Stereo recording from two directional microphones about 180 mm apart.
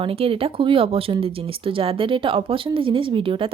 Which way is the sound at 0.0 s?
30° right (ahead or behind).